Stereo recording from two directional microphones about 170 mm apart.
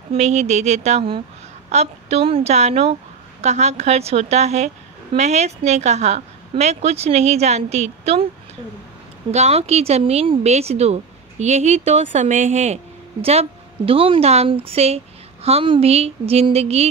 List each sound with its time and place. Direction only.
0.1 s speech: 40° right (ahead or behind)
9.3 s speech: 40° right (ahead or behind)